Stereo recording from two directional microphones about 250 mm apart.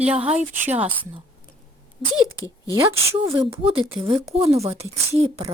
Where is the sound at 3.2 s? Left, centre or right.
Centre.